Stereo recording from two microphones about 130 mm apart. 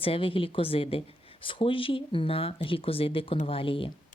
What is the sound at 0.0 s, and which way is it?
Speech, 45° left (ahead or behind).